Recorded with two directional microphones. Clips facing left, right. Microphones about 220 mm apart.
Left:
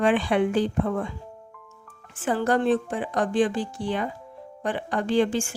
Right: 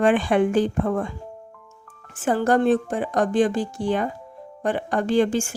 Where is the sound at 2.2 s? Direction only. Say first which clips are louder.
Right 3 dB; 45° right (ahead or behind).